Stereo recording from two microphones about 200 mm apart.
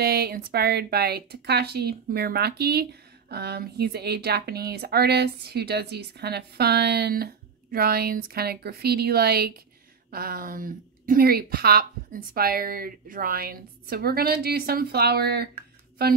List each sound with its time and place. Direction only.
0.0 s speech: 50° right (ahead or behind)